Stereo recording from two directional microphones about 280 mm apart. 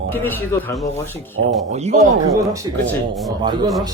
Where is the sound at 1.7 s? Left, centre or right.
Right.